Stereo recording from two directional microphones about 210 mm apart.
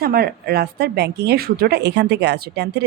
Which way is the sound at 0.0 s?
45° right (ahead or behind).